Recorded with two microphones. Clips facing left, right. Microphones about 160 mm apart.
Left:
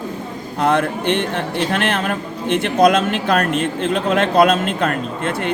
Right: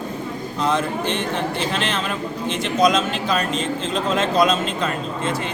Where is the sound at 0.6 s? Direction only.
60° left (ahead or behind).